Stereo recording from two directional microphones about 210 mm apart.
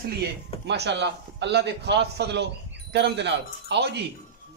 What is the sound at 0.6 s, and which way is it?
A man's voice, 55° right (ahead or behind).